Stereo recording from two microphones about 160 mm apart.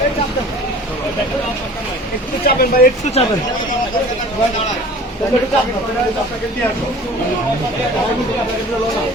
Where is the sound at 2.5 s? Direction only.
65° left (ahead or behind).